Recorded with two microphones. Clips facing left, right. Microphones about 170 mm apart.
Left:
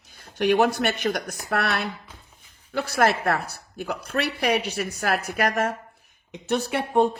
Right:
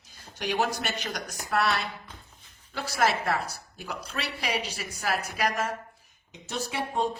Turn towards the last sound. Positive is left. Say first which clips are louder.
# left 8 dB
turn(degrees=60)  # may be behind; listen again after turning